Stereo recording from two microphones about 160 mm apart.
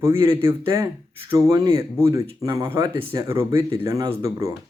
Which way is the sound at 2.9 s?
35° right (ahead or behind).